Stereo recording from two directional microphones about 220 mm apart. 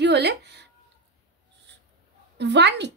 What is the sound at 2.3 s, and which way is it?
Speech, 50° right (ahead or behind).